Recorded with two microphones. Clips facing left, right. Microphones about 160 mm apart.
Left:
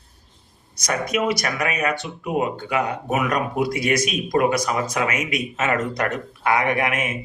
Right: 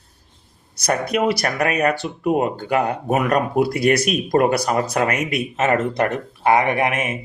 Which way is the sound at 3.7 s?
60° right (ahead or behind).